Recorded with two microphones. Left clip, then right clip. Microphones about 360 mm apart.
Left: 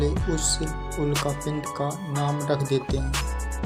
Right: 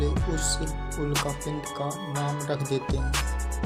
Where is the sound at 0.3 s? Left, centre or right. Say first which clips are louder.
Left 3 dB; right.